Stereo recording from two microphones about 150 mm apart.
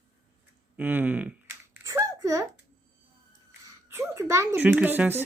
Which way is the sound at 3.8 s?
15° right (ahead or behind).